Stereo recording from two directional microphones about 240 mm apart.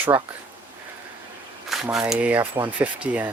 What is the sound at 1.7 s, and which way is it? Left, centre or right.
Speech, centre.